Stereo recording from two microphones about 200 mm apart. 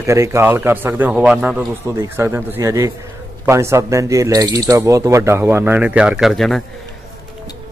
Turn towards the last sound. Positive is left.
turn(degrees=0)  # may be behind; listen again after turning